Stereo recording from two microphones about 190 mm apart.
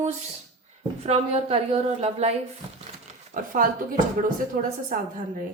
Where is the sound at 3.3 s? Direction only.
45° right (ahead or behind).